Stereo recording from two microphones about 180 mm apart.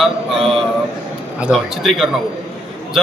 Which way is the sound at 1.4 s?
Centre (ahead or behind).